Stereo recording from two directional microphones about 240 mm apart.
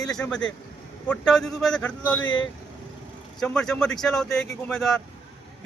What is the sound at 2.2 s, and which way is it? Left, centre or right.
Speech, left.